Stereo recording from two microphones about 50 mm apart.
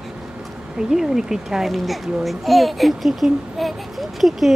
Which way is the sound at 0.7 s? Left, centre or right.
Centre.